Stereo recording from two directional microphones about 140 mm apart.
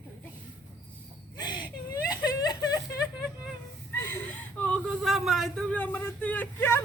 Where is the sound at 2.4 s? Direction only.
30° left (ahead or behind).